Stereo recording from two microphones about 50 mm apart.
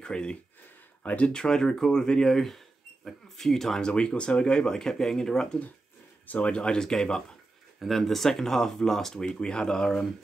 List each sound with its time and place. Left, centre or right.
0.0 s speech: centre
1.3 s speech: centre
3.9 s speech: left
6.2 s speech: left
7.8 s speech: centre